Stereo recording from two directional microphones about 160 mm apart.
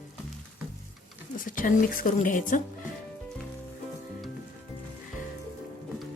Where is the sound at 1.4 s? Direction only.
55° left (ahead or behind).